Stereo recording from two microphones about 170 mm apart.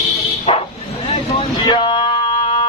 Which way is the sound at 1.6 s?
30° left (ahead or behind).